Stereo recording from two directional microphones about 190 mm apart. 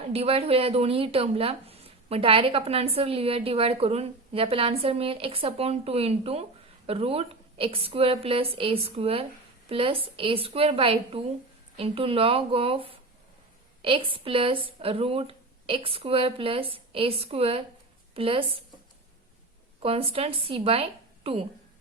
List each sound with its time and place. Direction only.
0.0 s a woman's voice: 30° right (ahead or behind)
19.8 s speech: 30° right (ahead or behind)